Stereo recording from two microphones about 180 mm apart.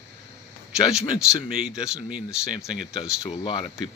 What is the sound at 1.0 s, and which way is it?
Speech, 20° left (ahead or behind).